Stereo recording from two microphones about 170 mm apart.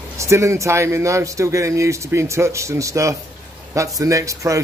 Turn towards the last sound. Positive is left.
turn(degrees=-20)  # may be behind; listen again after turning